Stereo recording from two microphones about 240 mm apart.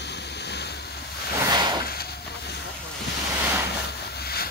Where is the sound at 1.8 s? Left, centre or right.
Left.